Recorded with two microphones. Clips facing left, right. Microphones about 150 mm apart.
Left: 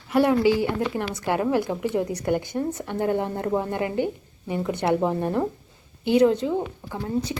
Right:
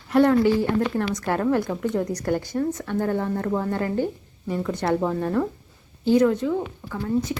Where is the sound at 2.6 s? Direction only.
20° left (ahead or behind).